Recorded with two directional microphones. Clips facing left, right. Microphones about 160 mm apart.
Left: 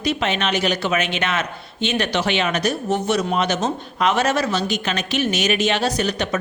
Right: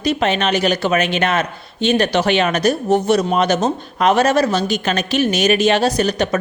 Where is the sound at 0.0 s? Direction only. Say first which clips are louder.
Right 4 dB; 40° right (ahead or behind).